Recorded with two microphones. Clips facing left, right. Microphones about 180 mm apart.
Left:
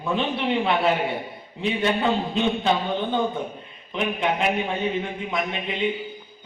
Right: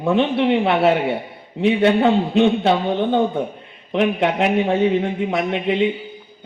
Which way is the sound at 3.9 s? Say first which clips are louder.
Right 7 dB; 75° right (ahead or behind).